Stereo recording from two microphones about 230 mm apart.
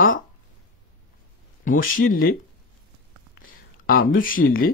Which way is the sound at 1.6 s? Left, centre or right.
Left.